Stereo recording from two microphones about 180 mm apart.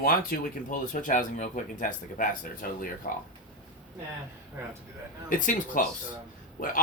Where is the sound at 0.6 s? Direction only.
45° left (ahead or behind).